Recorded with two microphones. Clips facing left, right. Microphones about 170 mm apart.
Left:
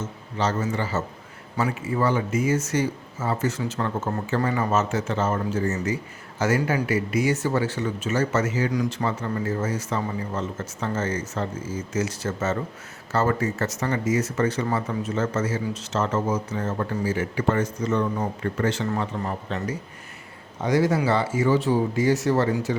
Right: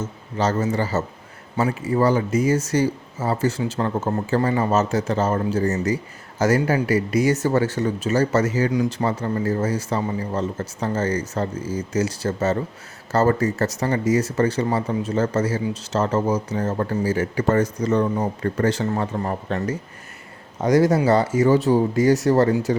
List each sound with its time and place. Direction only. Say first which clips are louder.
0.3 s a man's voice: right 4 dB; 40° right (ahead or behind)
8.7 s a man's voice: right 4 dB; 30° right (ahead or behind)